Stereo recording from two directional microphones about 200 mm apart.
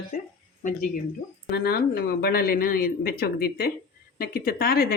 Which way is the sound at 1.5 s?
50° left (ahead or behind).